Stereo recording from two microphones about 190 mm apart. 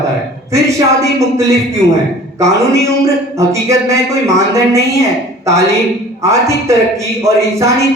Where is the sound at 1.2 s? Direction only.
15° right (ahead or behind).